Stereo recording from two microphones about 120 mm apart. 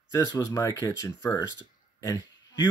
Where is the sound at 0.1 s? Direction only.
25° left (ahead or behind).